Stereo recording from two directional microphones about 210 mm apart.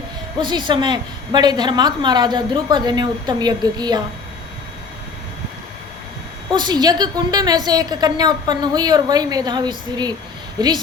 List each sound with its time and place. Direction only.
0.3 s a woman's voice: 20° right (ahead or behind)
6.5 s a woman's voice: 20° right (ahead or behind)